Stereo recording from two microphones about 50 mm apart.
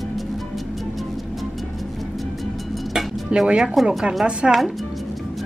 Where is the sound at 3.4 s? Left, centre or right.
Centre.